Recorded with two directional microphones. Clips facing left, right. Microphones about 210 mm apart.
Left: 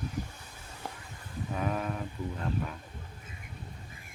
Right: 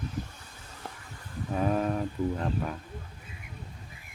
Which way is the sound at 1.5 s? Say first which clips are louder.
Right 6 dB; 35° right (ahead or behind).